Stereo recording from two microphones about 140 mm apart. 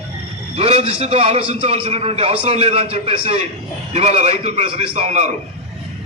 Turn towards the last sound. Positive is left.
turn(degrees=-55)  # may be behind; listen again after turning